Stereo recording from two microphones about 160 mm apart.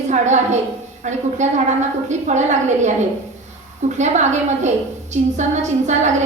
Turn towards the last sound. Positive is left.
turn(degrees=-45)  # may be behind; listen again after turning